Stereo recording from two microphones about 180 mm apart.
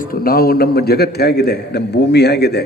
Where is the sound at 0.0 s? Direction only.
55° left (ahead or behind).